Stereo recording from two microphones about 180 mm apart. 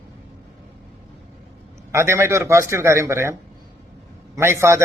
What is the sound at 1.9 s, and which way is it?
A man's voice, 15° right (ahead or behind).